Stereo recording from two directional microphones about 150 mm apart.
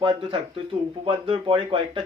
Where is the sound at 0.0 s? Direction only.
35° right (ahead or behind).